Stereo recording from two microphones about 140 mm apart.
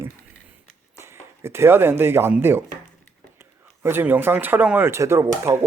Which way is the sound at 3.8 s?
15° right (ahead or behind).